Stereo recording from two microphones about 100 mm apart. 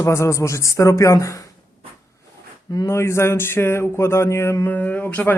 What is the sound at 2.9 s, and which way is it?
Speech, 25° left (ahead or behind).